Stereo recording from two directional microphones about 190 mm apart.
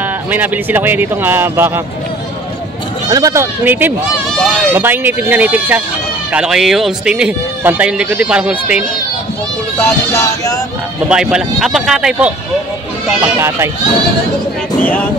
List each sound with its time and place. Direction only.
0.0 s speech: 10° right (ahead or behind)
3.1 s speech: 20° right (ahead or behind)
4.4 s speech: 5° left (ahead or behind)
4.7 s speech: 10° right (ahead or behind)
9.8 s speech: 15° left (ahead or behind)
11.1 s speech: 5° right (ahead or behind)